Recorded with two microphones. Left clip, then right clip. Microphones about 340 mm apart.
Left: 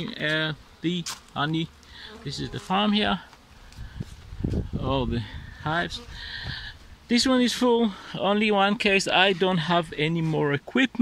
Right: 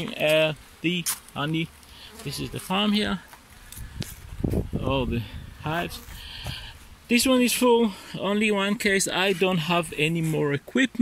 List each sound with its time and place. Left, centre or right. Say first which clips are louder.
0.0 s speech: right 5 dB; centre
4.4 s speech: right 4 dB; right
4.8 s speech: left 1 dB; centre